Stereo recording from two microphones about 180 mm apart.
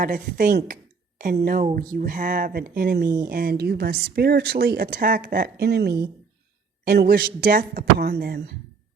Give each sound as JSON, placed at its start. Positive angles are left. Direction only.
{"t": 0.0, "sound": "speech", "side_deg": -50}